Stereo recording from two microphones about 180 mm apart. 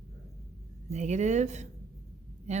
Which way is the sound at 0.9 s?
40° right (ahead or behind).